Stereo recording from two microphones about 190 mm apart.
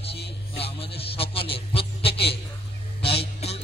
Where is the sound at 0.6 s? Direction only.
30° left (ahead or behind).